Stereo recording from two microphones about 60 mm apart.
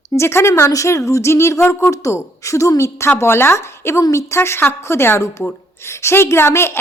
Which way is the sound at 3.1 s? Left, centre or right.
Left.